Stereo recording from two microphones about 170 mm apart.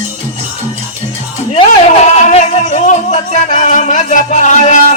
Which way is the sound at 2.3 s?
40° left (ahead or behind).